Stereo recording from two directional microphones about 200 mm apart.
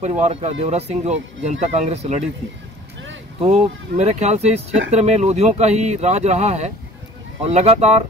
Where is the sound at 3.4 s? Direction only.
30° right (ahead or behind).